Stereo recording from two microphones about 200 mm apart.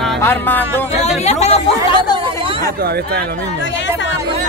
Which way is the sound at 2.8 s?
50° right (ahead or behind).